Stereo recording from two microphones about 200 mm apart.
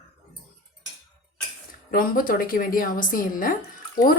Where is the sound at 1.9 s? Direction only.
45° left (ahead or behind).